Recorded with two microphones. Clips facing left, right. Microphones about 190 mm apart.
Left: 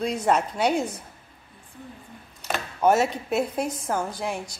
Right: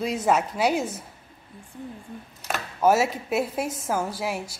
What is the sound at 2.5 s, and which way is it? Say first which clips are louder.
Speech: even; 5° right (ahead or behind).